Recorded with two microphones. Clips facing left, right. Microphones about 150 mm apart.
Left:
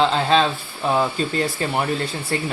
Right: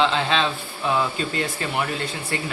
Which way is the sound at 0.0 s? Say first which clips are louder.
Left 4 dB; 40° left (ahead or behind).